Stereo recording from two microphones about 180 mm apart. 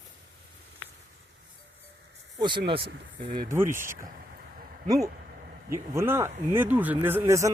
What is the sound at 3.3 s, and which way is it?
Speech, 15° right (ahead or behind).